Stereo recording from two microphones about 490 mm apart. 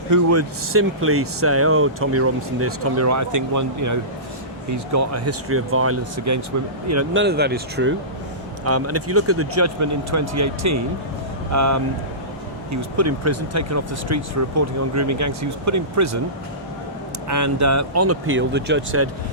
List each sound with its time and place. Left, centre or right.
0.1 s speech: right
17.2 s speech: right